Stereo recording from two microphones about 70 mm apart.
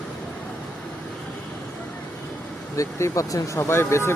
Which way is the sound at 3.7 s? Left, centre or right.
Left.